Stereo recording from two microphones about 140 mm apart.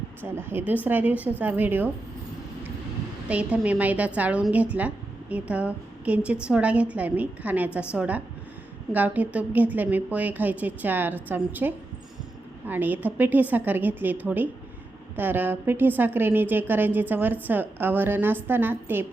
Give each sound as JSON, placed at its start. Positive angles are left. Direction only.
{"t": 0.2, "sound": "a woman's voice", "side_deg": -15}
{"t": 3.2, "sound": "a woman's voice", "side_deg": -10}